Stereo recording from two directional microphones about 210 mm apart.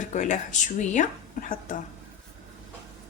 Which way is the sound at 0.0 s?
35° left (ahead or behind).